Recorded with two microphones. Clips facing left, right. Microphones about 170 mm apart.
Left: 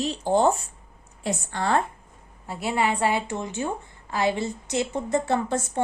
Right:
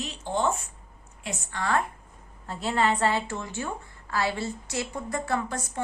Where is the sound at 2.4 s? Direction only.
10° left (ahead or behind).